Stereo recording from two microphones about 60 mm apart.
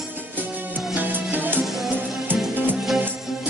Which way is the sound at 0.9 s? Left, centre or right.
Right.